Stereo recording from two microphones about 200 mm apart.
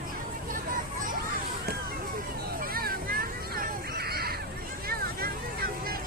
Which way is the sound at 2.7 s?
45° right (ahead or behind).